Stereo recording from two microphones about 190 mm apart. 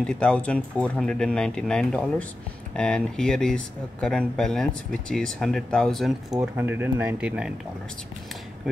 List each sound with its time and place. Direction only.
0.0 s speech: 5° left (ahead or behind)